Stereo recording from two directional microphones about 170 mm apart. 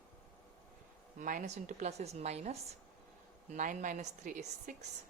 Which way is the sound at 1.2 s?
50° right (ahead or behind).